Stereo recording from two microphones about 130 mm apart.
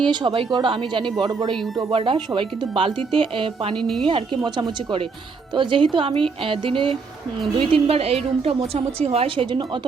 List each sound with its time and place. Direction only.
0.0 s a woman's voice: 35° right (ahead or behind)
3.8 s a woman's voice: centre (ahead or behind)
4.0 s a woman's voice: 40° right (ahead or behind)